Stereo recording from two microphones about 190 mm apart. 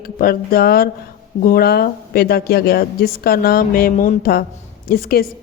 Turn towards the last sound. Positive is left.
turn(degrees=50)  # may be behind; listen again after turning